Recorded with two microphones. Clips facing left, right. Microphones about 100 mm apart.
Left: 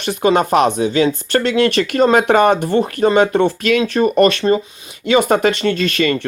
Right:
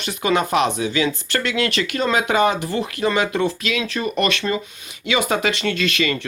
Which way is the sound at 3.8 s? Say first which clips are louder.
Left 10 dB; 40° left (ahead or behind).